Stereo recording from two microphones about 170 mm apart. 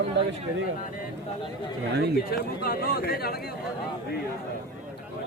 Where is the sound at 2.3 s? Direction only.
60° left (ahead or behind).